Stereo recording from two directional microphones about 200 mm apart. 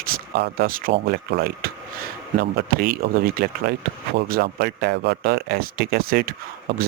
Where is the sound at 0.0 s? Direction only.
50° right (ahead or behind).